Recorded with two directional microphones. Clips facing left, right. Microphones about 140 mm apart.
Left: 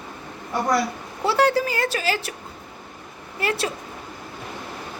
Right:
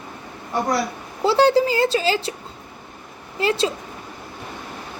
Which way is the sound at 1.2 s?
25° right (ahead or behind).